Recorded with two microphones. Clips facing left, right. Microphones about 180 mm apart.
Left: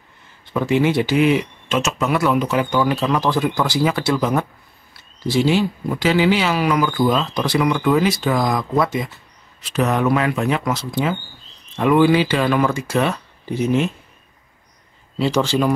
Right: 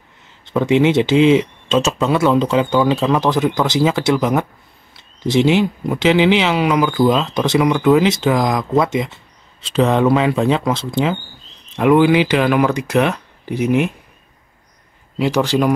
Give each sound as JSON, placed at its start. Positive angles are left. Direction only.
{"t": 0.5, "sound": "speech", "side_deg": -20}
{"t": 15.1, "sound": "speech", "side_deg": -15}